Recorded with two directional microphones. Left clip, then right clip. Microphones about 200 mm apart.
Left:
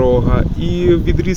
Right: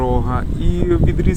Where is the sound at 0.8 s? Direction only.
10° left (ahead or behind).